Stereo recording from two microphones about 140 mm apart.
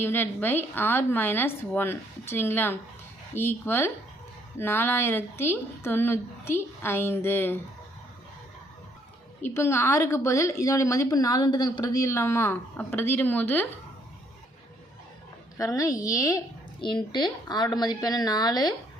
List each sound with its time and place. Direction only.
0.0 s a woman's voice: 15° left (ahead or behind)
9.4 s a woman's voice: 20° left (ahead or behind)
15.5 s a woman's voice: 25° left (ahead or behind)